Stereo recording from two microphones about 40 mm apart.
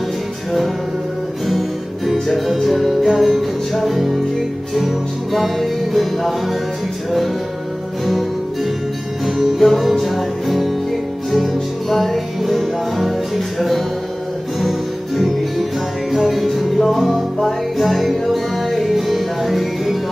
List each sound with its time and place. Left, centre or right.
1.5 s music: centre
8.0 s music: centre
11.9 s music: centre